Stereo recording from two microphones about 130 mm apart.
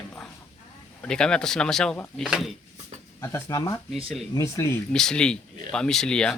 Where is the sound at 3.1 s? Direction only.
20° left (ahead or behind).